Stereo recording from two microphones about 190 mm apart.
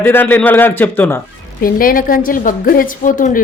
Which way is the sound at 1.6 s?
50° left (ahead or behind).